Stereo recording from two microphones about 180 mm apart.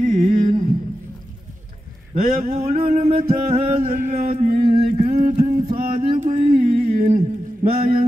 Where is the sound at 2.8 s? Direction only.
50° right (ahead or behind).